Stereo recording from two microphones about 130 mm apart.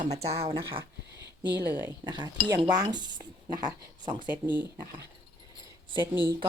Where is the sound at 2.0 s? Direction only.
35° right (ahead or behind).